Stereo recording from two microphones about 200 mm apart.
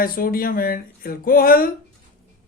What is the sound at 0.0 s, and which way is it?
Speech, 45° left (ahead or behind).